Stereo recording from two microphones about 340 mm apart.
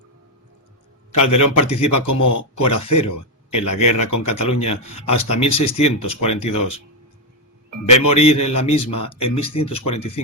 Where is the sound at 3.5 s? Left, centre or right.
Centre.